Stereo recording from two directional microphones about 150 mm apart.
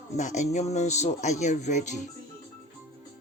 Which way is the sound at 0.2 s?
50° left (ahead or behind).